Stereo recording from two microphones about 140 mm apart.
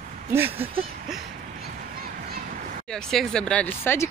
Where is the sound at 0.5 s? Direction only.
45° right (ahead or behind).